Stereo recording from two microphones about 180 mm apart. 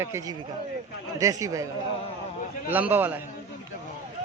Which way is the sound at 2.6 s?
10° right (ahead or behind).